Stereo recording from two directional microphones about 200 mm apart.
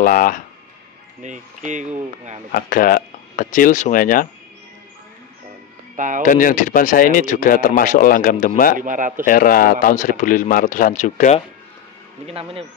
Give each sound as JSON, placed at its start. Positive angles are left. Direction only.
{"t": 0.0, "sound": "speech", "side_deg": 45}
{"t": 1.2, "sound": "speech", "side_deg": -40}
{"t": 2.5, "sound": "speech", "side_deg": 45}
{"t": 5.9, "sound": "speech", "side_deg": -40}
{"t": 6.2, "sound": "speech", "side_deg": 40}
{"t": 8.7, "sound": "speech", "side_deg": -40}
{"t": 9.2, "sound": "speech", "side_deg": 45}
{"t": 12.3, "sound": "speech", "side_deg": -30}